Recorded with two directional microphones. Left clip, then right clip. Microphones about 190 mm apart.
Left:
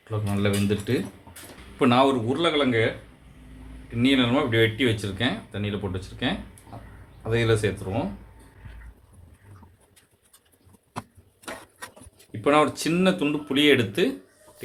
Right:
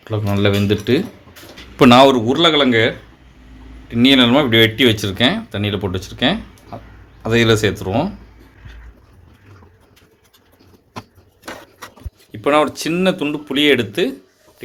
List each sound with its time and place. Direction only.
0.0 s speech: 45° right (ahead or behind)
3.9 s speech: 50° right (ahead or behind)
12.3 s speech: 45° right (ahead or behind)